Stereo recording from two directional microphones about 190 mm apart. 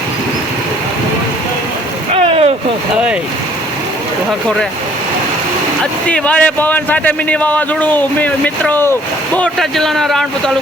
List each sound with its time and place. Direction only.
2.2 s boat: 30° right (ahead or behind)
5.8 s speech: 5° left (ahead or behind)